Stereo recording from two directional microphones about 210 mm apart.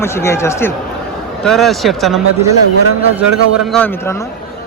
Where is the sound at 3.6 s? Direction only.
5° left (ahead or behind).